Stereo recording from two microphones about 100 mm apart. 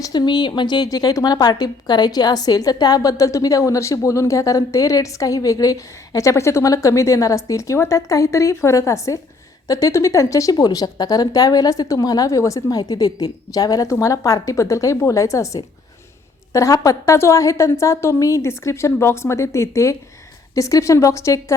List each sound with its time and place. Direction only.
0.0 s a woman's voice: 45° left (ahead or behind); by 21.4 s 30° left (ahead or behind)